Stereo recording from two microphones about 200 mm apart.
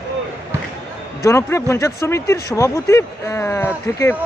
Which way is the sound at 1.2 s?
15° left (ahead or behind).